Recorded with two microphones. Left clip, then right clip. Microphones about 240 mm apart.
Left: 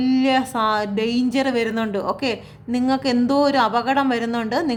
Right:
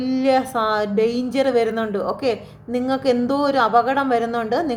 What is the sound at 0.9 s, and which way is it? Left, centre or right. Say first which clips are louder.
Speech: right 3 dB; left.